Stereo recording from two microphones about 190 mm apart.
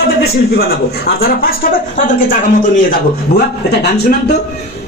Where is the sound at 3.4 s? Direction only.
60° left (ahead or behind).